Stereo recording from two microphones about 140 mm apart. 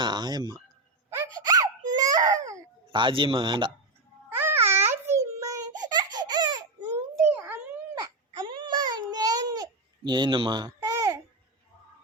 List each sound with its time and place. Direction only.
0.0 s speech: 30° right (ahead or behind)
1.1 s gasp: 25° right (ahead or behind)
1.9 s baby cry: 25° right (ahead or behind)
4.3 s babbling: 15° right (ahead or behind)
7.3 s a sound: 10° right (ahead or behind)
8.0 s baby cry: 30° right (ahead or behind)
10.9 s babbling: 20° right (ahead or behind)